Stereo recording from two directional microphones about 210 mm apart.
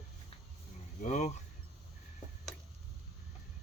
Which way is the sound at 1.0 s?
35° left (ahead or behind).